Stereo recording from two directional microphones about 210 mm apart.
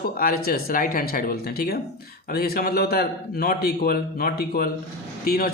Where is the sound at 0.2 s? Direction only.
45° left (ahead or behind).